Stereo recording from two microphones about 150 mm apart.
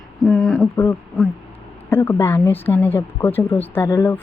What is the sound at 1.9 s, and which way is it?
Speech, 15° left (ahead or behind).